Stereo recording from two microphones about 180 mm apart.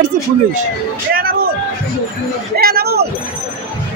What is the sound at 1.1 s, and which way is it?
Vehicle, 55° right (ahead or behind).